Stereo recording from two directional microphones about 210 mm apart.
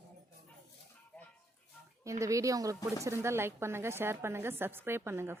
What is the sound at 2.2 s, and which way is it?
A woman's voice, 15° right (ahead or behind).